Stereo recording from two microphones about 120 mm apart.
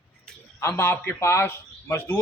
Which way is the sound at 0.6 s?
20° left (ahead or behind).